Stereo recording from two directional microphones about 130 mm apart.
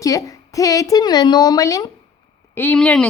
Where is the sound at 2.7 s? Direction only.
5° left (ahead or behind).